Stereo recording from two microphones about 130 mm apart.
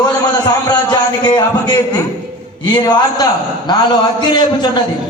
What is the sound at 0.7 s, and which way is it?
Music, 35° left (ahead or behind).